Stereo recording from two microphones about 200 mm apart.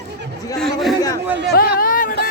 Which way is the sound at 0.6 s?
Centre (ahead or behind).